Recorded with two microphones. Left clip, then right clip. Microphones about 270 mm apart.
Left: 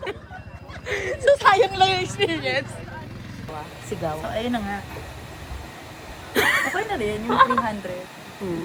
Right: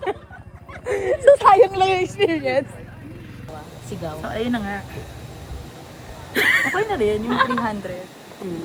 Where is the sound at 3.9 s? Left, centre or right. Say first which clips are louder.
Left 3 dB; left.